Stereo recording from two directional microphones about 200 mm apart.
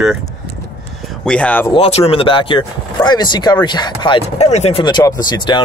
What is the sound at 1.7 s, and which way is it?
Speech, 30° left (ahead or behind).